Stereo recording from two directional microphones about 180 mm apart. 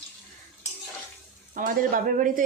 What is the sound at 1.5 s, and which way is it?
Speech, 50° right (ahead or behind).